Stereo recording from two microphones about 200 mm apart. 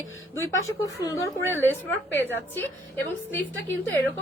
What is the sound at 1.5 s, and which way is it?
Speech, 10° right (ahead or behind).